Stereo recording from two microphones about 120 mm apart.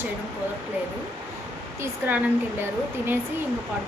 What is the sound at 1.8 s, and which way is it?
Speech, 15° right (ahead or behind).